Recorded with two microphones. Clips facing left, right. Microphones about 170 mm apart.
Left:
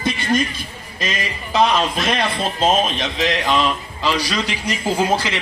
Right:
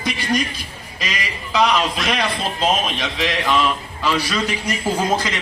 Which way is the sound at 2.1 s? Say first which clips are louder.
Left 1 dB; 25° left (ahead or behind).